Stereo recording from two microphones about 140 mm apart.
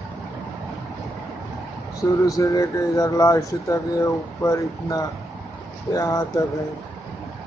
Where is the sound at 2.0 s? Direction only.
25° left (ahead or behind).